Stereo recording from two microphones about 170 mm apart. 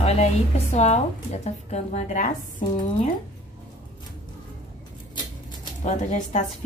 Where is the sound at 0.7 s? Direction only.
40° left (ahead or behind).